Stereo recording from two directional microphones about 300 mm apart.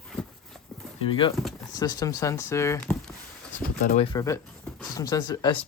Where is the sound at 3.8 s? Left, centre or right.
Centre.